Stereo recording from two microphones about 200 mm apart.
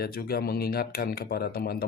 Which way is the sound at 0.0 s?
50° left (ahead or behind).